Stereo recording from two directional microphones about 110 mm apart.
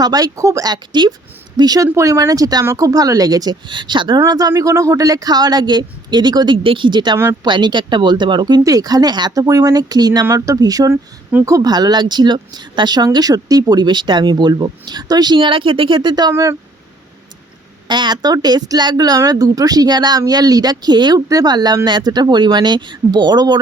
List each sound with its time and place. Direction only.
0.0 s speech: 35° right (ahead or behind)
4.3 s speech: 35° right (ahead or behind)
16.3 s speech: 30° right (ahead or behind)
17.8 s speech: 45° right (ahead or behind)